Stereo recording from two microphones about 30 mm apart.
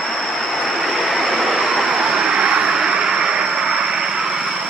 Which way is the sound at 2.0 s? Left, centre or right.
Right.